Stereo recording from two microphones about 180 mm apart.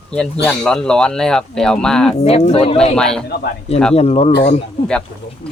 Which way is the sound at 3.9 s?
35° left (ahead or behind).